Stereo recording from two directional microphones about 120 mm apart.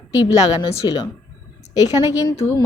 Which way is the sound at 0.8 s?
35° left (ahead or behind).